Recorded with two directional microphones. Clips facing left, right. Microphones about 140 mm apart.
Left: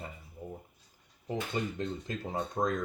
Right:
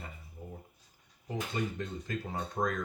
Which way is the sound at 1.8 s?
25° left (ahead or behind).